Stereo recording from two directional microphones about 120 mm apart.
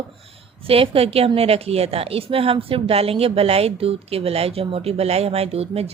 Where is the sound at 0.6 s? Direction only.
50° right (ahead or behind).